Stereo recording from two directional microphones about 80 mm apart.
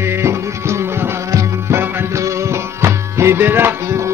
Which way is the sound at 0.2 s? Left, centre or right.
Right.